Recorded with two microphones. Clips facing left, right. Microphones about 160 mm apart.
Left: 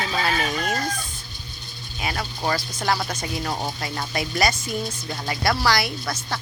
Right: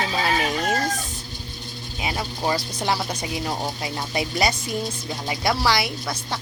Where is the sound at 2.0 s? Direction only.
15° right (ahead or behind).